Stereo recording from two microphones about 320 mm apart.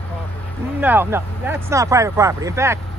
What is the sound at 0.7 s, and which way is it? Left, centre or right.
Speech, centre.